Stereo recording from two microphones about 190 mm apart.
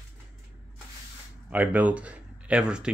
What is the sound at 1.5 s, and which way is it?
Speech, 10° right (ahead or behind).